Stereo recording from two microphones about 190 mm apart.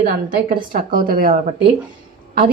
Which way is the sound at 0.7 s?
50° right (ahead or behind).